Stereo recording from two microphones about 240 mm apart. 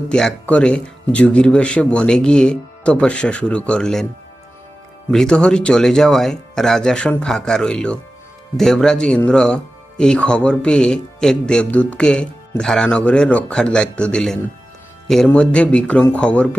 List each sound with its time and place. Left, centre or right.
0.1 s speech: centre
5.1 s speech: centre